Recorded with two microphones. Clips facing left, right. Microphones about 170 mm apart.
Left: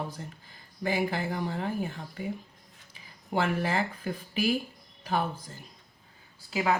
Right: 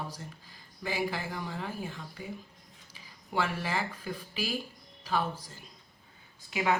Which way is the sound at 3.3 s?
50° left (ahead or behind).